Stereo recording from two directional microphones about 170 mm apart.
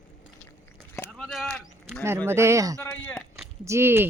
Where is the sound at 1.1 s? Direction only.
Centre (ahead or behind).